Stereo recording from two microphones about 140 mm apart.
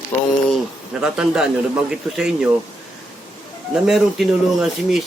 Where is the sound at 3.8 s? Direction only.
Centre (ahead or behind).